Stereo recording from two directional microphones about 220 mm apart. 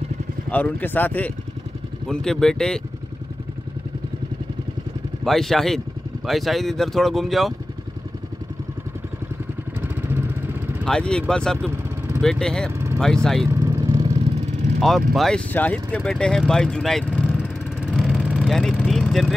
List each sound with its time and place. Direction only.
0.5 s speech: 5° left (ahead or behind)
5.2 s speech: centre (ahead or behind)
9.8 s vehicle: 10° right (ahead or behind)
10.8 s speech: 5° left (ahead or behind)
13.5 s vehicle: 15° right (ahead or behind)
14.8 s speech: centre (ahead or behind)
17.8 s vehicle: centre (ahead or behind)